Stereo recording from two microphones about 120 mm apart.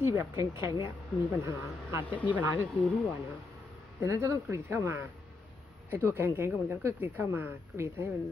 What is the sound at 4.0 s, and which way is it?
Speech, 25° right (ahead or behind).